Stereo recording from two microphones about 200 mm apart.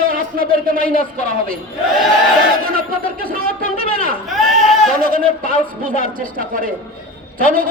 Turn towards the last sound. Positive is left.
turn(degrees=-45)  # may be behind; listen again after turning